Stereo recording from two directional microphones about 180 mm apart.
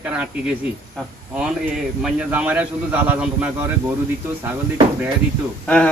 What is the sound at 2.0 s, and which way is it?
A man's voice, 5° right (ahead or behind).